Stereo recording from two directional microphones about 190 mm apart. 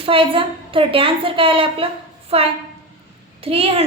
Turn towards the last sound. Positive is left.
turn(degrees=-30)  # may be behind; listen again after turning